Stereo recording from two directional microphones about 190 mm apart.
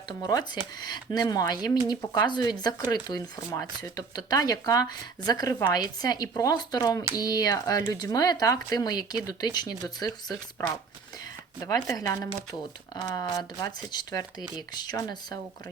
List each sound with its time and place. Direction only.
0.2 s speech: 20° left (ahead or behind)
11.6 s speech: 20° left (ahead or behind)